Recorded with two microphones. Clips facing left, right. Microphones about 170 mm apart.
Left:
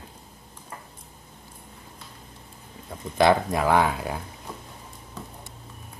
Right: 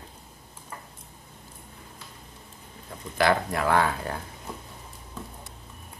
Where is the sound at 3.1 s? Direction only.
20° left (ahead or behind).